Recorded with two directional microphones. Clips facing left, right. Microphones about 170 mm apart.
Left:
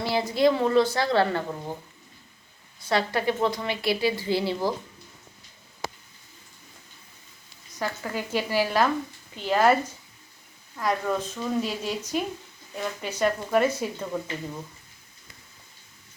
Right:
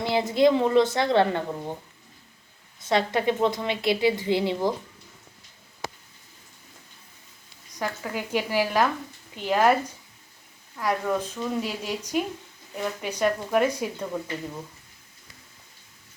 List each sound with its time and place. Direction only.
0.0 s a woman's voice: 20° right (ahead or behind)
2.8 s a woman's voice: 20° right (ahead or behind)
7.7 s speech: 10° right (ahead or behind)